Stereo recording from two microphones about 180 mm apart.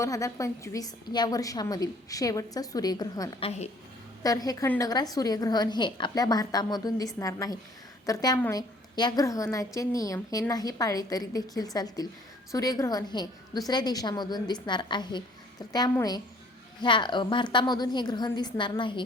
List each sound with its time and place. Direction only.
0.0 s a woman's voice: 15° left (ahead or behind)